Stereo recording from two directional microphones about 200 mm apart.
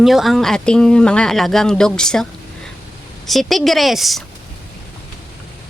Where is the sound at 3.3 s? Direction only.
Centre (ahead or behind).